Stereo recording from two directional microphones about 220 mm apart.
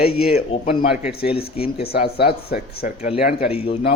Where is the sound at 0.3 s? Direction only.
30° left (ahead or behind).